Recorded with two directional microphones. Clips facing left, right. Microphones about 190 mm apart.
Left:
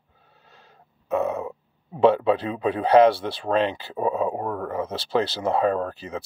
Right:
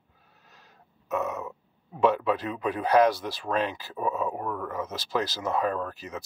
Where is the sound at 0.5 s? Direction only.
30° left (ahead or behind).